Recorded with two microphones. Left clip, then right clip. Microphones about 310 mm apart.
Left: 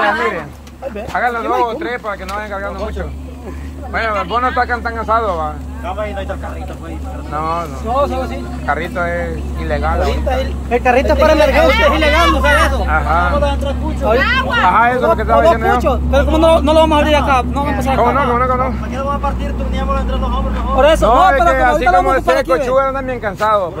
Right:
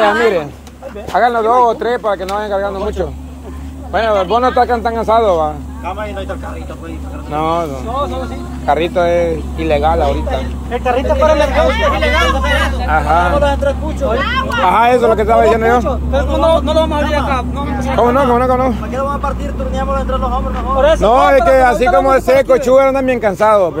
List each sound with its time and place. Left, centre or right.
1.1 s speech: right
3.9 s speech: right
5.1 s speech: right
7.3 s speech: right
8.7 s speech: right
9.7 s speech: right
10.8 s speech: left; by 12.8 s centre
12.8 s speech: centre
14.1 s speech: left
14.6 s speech: right
15.8 s speech: left
17.9 s speech: right
20.7 s speech: left
21.0 s speech: right